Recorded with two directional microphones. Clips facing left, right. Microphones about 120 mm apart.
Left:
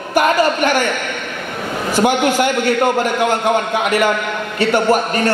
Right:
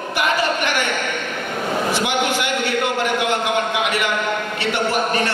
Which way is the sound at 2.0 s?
45° left (ahead or behind).